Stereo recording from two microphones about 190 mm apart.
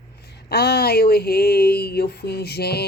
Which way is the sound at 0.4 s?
55° left (ahead or behind).